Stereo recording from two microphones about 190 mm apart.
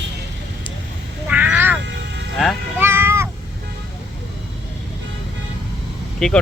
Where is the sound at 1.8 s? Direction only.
65° right (ahead or behind).